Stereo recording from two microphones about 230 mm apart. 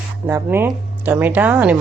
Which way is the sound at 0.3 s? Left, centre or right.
Centre.